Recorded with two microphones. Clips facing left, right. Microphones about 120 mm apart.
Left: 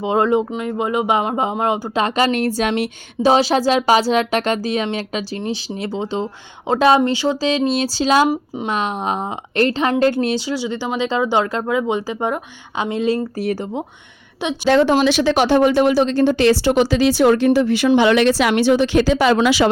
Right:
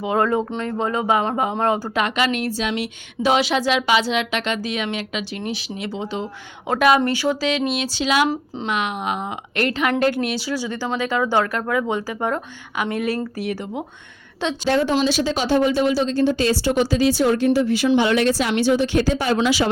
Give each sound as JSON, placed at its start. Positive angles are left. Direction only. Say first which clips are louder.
{"t": 0.0, "sound": "speech", "louder": "left 3 dB", "side_deg": 20}
{"t": 2.0, "sound": "speech", "louder": "left 4 dB", "side_deg": 35}
{"t": 7.4, "sound": "speech", "louder": "left 4 dB", "side_deg": 30}
{"t": 13.4, "sound": "speech", "louder": "left 4 dB", "side_deg": 35}
{"t": 14.7, "sound": "speech", "louder": "left 6 dB", "side_deg": 80}
{"t": 14.9, "sound": "speech", "louder": "left 5 dB", "side_deg": 70}